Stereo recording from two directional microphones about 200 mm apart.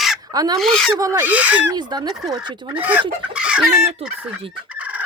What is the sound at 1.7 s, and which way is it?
Speech, 20° right (ahead or behind).